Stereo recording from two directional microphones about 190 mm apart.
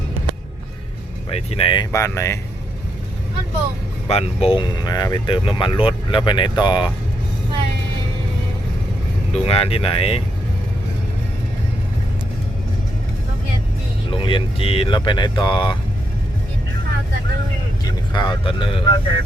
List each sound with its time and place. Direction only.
1.3 s speech: 30° left (ahead or behind); by 2.4 s 15° left (ahead or behind)
4.1 s speech: 35° left (ahead or behind)
9.3 s speech: 30° left (ahead or behind)
14.1 s speech: 25° left (ahead or behind)
17.8 s speech: 25° left (ahead or behind)